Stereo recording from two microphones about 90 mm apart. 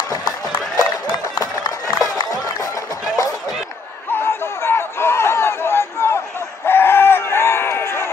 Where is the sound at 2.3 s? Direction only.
40° left (ahead or behind).